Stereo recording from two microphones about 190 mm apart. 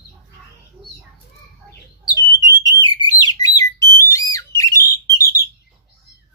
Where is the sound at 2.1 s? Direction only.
20° left (ahead or behind).